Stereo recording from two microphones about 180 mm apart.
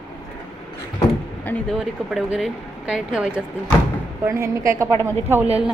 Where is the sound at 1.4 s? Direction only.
10° left (ahead or behind).